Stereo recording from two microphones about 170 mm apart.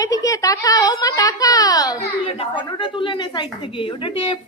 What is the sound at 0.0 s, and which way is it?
A woman's voice, 20° left (ahead or behind).